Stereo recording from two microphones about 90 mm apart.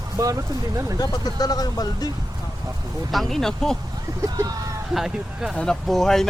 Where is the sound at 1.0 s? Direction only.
45° left (ahead or behind).